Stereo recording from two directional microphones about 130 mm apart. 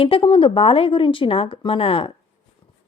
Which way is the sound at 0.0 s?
40° left (ahead or behind).